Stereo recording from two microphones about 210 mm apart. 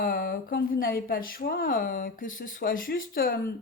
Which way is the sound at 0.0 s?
45° left (ahead or behind).